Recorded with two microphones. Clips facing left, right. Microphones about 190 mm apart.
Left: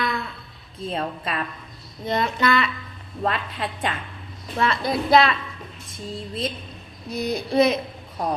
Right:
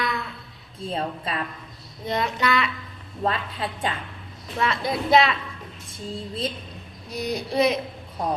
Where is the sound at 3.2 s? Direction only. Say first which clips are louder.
Even; 30° right (ahead or behind).